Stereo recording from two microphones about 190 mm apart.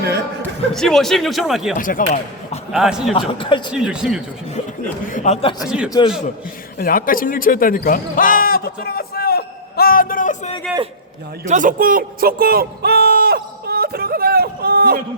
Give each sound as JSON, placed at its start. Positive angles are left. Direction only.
{"t": 0.7, "sound": "a man's voice", "side_deg": 0}
{"t": 1.8, "sound": "speech", "side_deg": 45}
{"t": 2.7, "sound": "a man's voice", "side_deg": 0}
{"t": 3.1, "sound": "a man's voice", "side_deg": 30}
{"t": 3.7, "sound": "a man's voice", "side_deg": -5}
{"t": 5.0, "sound": "speech", "side_deg": 40}
{"t": 5.6, "sound": "a man's voice", "side_deg": -5}
{"t": 6.7, "sound": "speech", "side_deg": 50}
{"t": 11.4, "sound": "a sound", "side_deg": -40}